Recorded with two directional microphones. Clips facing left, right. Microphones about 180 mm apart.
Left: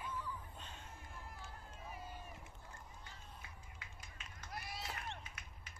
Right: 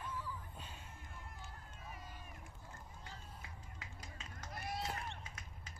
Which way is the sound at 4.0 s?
45° right (ahead or behind).